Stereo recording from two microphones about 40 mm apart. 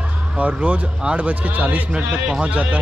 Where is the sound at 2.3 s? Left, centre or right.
Right.